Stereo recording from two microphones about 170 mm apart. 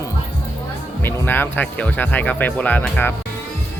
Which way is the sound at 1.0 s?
10° left (ahead or behind).